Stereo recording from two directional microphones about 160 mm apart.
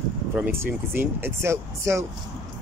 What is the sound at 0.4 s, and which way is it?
Speech, 10° right (ahead or behind).